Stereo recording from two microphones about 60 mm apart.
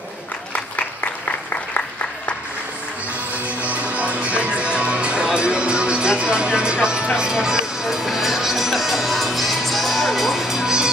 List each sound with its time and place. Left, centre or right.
3.4 s music: right